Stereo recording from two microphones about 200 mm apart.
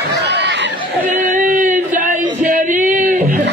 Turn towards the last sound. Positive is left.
turn(degrees=-40)  # may be behind; listen again after turning